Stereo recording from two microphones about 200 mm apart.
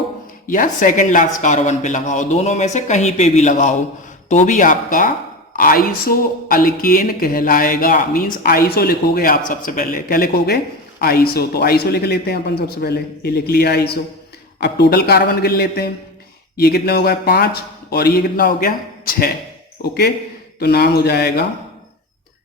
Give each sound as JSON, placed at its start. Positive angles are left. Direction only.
{"t": 0.4, "sound": "a woman's voice", "side_deg": 40}